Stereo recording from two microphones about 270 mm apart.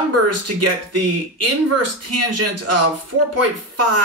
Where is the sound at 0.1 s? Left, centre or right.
Right.